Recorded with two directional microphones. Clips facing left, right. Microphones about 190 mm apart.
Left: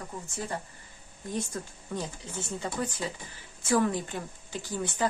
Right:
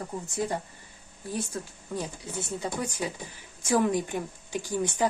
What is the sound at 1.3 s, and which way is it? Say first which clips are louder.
A woman's voice: right 1 dB; 10° right (ahead or behind).